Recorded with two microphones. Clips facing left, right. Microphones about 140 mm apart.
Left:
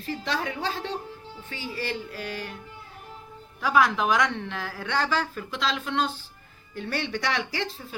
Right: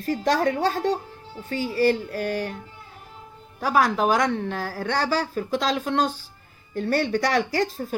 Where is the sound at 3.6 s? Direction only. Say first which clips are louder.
Right 2 dB; 40° right (ahead or behind).